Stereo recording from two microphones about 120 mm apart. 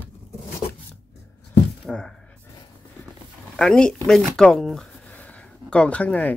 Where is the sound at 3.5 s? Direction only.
5° left (ahead or behind).